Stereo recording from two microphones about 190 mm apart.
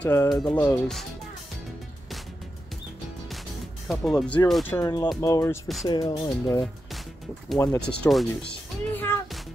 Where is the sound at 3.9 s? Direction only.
Centre (ahead or behind).